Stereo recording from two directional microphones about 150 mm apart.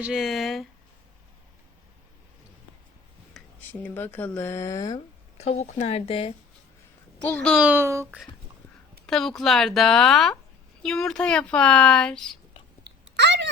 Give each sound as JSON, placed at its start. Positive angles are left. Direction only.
{"t": 0.0, "sound": "a child's voice", "side_deg": -5}
{"t": 3.3, "sound": "a sound", "side_deg": 0}
{"t": 3.7, "sound": "speech", "side_deg": 15}
{"t": 5.4, "sound": "speech", "side_deg": 45}
{"t": 7.3, "sound": "speech", "side_deg": 10}
{"t": 7.5, "sound": "speech", "side_deg": -10}
{"t": 9.0, "sound": "a woman's voice", "side_deg": 0}